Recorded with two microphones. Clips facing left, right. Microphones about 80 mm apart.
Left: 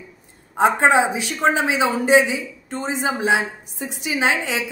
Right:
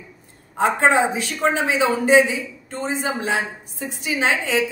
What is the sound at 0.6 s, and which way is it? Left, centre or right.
A woman's voice, centre.